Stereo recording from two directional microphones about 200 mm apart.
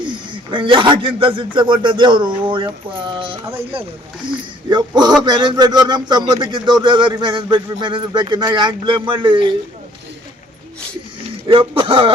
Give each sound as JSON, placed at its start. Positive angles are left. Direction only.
{"t": 0.5, "sound": "a man's voice", "side_deg": -25}
{"t": 11.4, "sound": "a man's voice", "side_deg": -25}